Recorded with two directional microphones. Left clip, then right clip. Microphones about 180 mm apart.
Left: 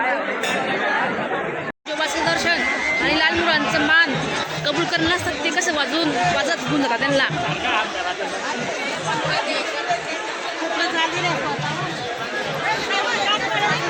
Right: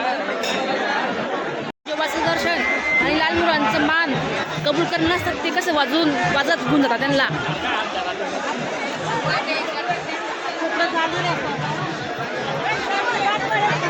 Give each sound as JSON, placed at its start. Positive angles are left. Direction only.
{"t": 2.0, "sound": "chatter", "side_deg": -10}
{"t": 3.1, "sound": "a sound", "side_deg": -10}
{"t": 4.6, "sound": "speech", "side_deg": -10}